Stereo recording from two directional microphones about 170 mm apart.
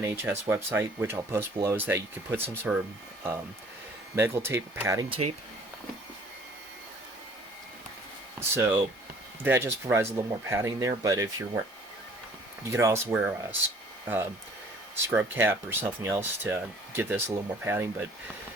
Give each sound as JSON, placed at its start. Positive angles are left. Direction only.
{"t": 0.0, "sound": "speech", "side_deg": -15}
{"t": 4.1, "sound": "speech", "side_deg": -15}
{"t": 5.0, "sound": "speech", "side_deg": -30}
{"t": 8.4, "sound": "speech", "side_deg": -15}
{"t": 12.7, "sound": "speech", "side_deg": -15}
{"t": 15.0, "sound": "speech", "side_deg": -15}